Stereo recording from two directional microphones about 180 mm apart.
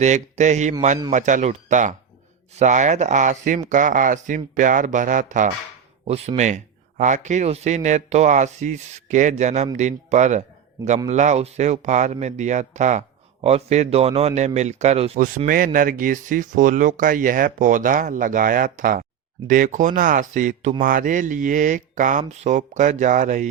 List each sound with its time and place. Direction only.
0.0 s speech: 40° right (ahead or behind)
6.1 s speech: 35° right (ahead or behind)
10.8 s a man's voice: 20° right (ahead or behind)
11.1 s speech: 40° right (ahead or behind)
15.4 s speech: 50° right (ahead or behind)